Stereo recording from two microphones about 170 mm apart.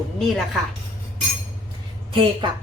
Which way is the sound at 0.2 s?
Centre (ahead or behind).